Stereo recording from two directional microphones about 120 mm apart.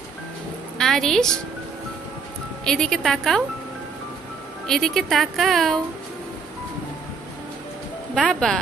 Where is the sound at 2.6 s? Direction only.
5° left (ahead or behind).